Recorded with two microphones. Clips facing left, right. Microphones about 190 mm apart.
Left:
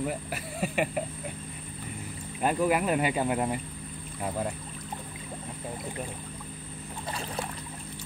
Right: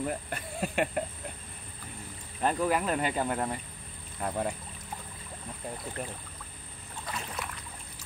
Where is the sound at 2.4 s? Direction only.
10° left (ahead or behind).